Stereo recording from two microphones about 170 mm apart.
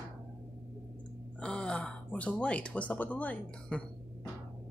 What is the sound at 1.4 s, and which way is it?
Speech, 5° left (ahead or behind).